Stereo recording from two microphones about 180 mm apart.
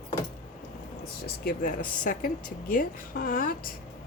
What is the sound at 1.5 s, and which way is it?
Speech, 50° left (ahead or behind).